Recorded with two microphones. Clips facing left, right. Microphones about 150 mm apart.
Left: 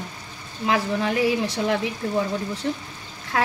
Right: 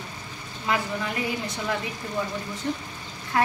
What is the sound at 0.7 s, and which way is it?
Speech, 90° left.